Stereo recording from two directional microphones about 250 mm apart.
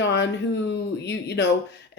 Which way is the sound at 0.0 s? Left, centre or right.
Left.